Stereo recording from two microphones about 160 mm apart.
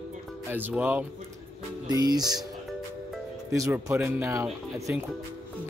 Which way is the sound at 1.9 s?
25° right (ahead or behind).